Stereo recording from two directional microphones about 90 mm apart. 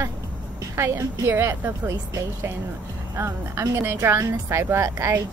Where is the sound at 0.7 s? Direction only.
30° right (ahead or behind).